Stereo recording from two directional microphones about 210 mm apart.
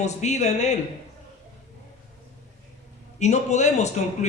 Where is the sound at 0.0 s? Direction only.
35° left (ahead or behind).